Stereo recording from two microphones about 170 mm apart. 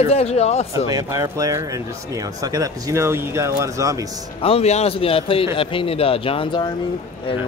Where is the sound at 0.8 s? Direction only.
20° right (ahead or behind).